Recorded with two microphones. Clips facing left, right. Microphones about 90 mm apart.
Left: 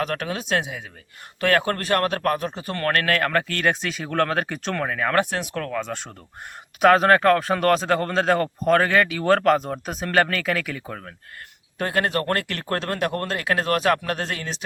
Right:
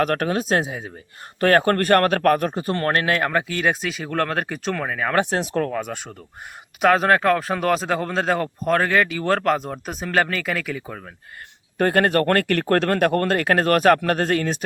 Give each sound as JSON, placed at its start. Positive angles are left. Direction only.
{"t": 0.0, "sound": "speech", "side_deg": -45}
{"t": 2.6, "sound": "speech", "side_deg": -30}
{"t": 5.1, "sound": "speech", "side_deg": -20}
{"t": 5.7, "sound": "speech", "side_deg": -10}
{"t": 6.8, "sound": "speech", "side_deg": 0}
{"t": 11.8, "sound": "speech", "side_deg": -45}